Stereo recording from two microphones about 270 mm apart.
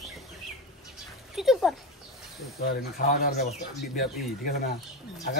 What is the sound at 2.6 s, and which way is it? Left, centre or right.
Speech, left.